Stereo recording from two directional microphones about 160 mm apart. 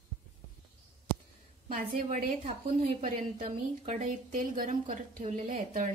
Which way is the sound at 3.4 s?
35° right (ahead or behind).